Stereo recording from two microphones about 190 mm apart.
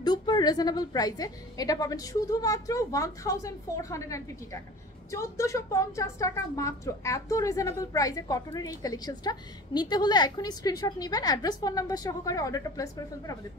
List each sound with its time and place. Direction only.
0.0 s a woman's voice: 20° left (ahead or behind)